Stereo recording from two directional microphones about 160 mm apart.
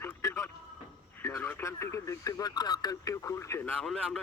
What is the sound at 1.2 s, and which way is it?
Speech, 15° left (ahead or behind).